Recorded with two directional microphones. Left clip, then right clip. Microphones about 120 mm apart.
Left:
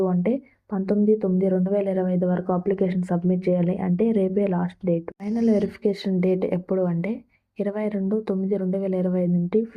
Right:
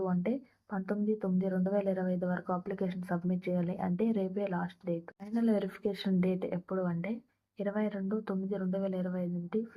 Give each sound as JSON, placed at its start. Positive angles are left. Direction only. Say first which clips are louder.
{"t": 0.0, "sound": "a woman's voice", "louder": "left 11 dB", "side_deg": 30}